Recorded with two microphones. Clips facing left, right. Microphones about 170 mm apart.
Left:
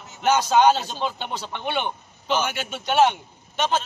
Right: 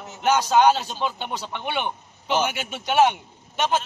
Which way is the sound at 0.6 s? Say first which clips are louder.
Even; 5° right (ahead or behind).